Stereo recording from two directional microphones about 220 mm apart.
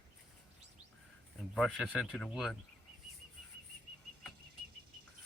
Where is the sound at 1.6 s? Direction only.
Centre (ahead or behind).